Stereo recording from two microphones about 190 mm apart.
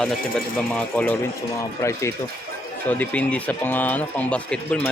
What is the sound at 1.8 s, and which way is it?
Speech, 15° left (ahead or behind).